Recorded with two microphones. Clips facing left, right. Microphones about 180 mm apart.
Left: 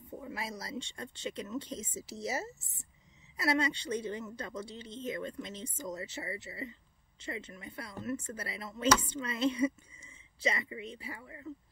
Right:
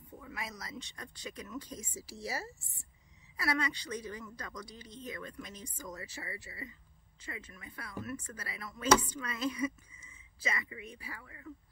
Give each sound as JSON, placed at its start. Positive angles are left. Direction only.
{"t": 0.2, "sound": "speech", "side_deg": 30}